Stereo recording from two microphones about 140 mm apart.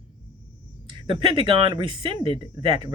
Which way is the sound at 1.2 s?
35° right (ahead or behind).